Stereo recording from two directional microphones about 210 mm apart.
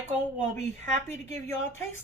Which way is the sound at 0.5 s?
35° right (ahead or behind).